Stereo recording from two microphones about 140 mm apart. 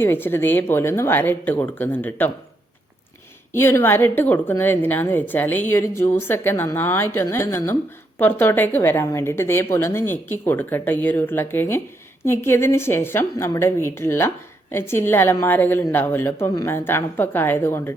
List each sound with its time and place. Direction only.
0.0 s a woman's voice: 15° left (ahead or behind)
3.5 s a woman's voice: 15° left (ahead or behind)